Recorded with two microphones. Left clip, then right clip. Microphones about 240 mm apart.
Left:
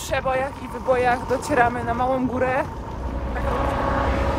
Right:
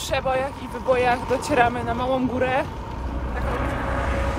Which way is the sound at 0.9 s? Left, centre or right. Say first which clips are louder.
Even; centre.